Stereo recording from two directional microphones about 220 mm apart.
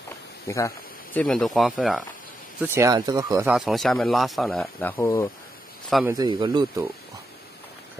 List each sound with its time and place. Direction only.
0.5 s speech: 15° left (ahead or behind)
2.6 s speech: 10° right (ahead or behind)
3.5 s speech: centre (ahead or behind)
6.0 s speech: 20° right (ahead or behind)